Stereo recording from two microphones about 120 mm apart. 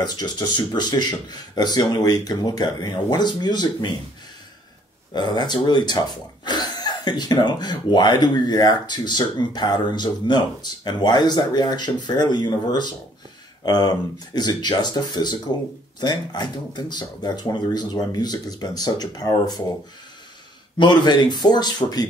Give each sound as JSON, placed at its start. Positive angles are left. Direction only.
{"t": 0.0, "sound": "speech", "side_deg": 35}
{"t": 5.1, "sound": "speech", "side_deg": 35}
{"t": 20.7, "sound": "speech", "side_deg": 40}